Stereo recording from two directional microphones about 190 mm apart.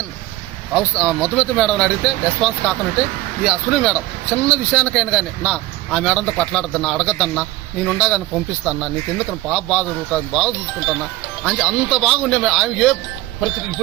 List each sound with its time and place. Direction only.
0.7 s a man's voice: 5° left (ahead or behind)